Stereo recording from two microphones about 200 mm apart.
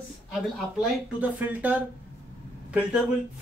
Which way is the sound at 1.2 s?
5° right (ahead or behind).